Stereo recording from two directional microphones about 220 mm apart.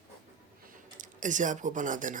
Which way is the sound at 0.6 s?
35° right (ahead or behind).